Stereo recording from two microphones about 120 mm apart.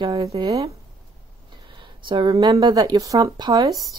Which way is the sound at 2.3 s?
35° right (ahead or behind).